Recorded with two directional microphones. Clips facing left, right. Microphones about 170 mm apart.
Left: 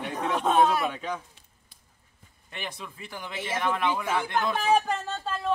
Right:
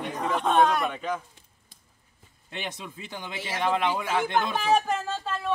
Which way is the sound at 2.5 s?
20° right (ahead or behind).